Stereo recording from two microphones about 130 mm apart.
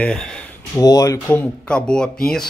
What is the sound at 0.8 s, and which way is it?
Speech, 25° left (ahead or behind).